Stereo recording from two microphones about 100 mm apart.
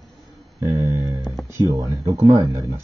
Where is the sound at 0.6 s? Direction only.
35° right (ahead or behind).